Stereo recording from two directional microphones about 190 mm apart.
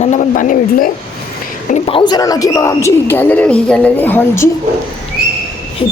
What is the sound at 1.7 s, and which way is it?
A man's voice, 25° left (ahead or behind).